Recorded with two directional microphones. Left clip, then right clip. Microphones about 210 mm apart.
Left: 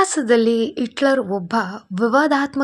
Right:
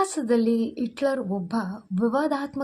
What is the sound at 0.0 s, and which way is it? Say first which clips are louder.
Speech: left 7 dB; 30° left (ahead or behind).